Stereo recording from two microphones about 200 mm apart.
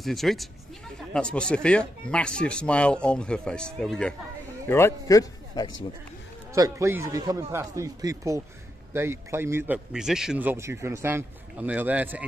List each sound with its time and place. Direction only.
0.0 s a man's voice: centre (ahead or behind); by 5.7 s 15° left (ahead or behind)
6.5 s speech: 15° right (ahead or behind)